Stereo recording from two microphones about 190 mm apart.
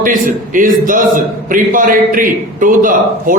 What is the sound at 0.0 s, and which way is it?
A man's voice, 45° right (ahead or behind).